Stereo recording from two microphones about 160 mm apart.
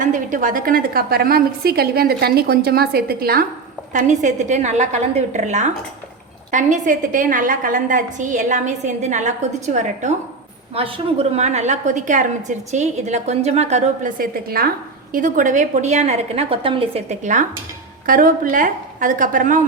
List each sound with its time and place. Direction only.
0.0 s a woman's voice: 55° right (ahead or behind)
3.9 s a woman's voice: 50° right (ahead or behind)
10.8 s a woman's voice: 35° right (ahead or behind)
18.0 s a woman's voice: 60° right (ahead or behind)